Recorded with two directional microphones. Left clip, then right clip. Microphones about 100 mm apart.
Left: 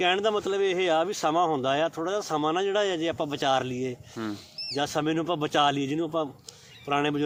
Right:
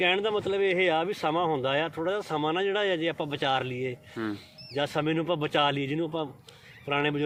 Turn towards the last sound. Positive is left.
turn(degrees=45)  # may be behind; listen again after turning